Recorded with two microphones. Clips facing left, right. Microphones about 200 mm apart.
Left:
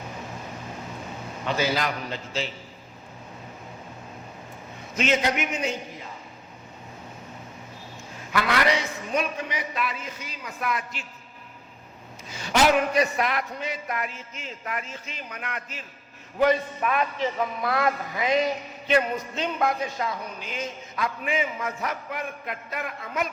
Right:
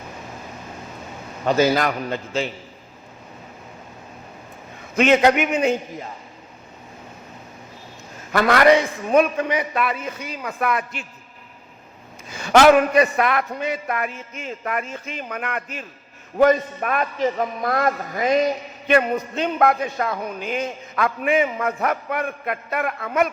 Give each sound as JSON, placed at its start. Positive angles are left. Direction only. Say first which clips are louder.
{"t": 1.5, "sound": "a man's voice", "louder": "right 8 dB", "side_deg": -45}
{"t": 4.9, "sound": "a man's voice", "louder": "right 9 dB", "side_deg": -60}
{"t": 8.3, "sound": "a man's voice", "louder": "right 9 dB", "side_deg": -50}
{"t": 12.3, "sound": "a man's voice", "louder": "right 8 dB", "side_deg": -55}